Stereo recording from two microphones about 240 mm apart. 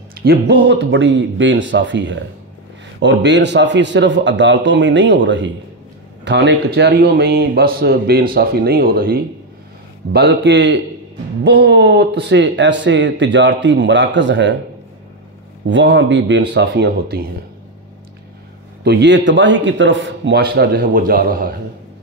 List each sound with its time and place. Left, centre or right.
0.1 s a man's voice: right
15.6 s speech: right
18.9 s speech: right